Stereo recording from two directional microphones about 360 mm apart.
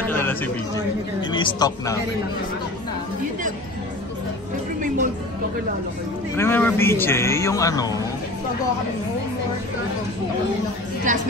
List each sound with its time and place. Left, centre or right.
0.0 s a sound: centre
1.3 s a man's voice: centre
4.8 s chatter: right
6.3 s a man's voice: centre
11.1 s a woman's voice: right